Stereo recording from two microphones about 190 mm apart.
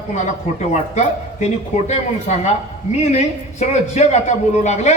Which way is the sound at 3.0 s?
35° left (ahead or behind).